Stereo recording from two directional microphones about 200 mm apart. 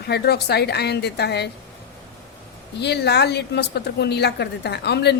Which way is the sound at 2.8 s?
55° left (ahead or behind).